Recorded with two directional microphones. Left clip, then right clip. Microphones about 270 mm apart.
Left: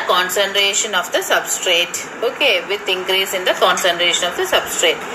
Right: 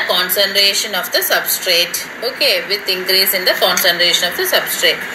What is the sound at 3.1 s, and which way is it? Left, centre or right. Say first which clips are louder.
A woman's voice: right 4 dB; left.